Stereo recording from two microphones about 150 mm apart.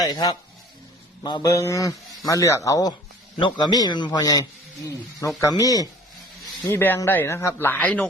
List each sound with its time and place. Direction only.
0.0 s a man's voice: 25° left (ahead or behind)